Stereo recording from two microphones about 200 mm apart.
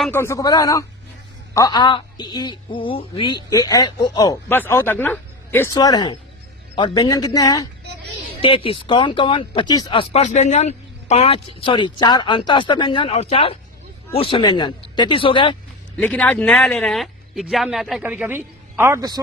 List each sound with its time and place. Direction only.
0.1 s speech: 10° left (ahead or behind)
16.0 s speech: 5° left (ahead or behind); by 19.2 s 15° right (ahead or behind)